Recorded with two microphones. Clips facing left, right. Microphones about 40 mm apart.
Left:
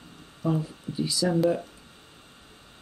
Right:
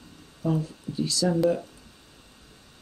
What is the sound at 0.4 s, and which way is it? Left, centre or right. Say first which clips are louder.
Speech: even; centre.